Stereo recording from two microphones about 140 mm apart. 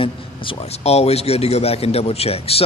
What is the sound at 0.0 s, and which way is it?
A man's voice, 40° left (ahead or behind).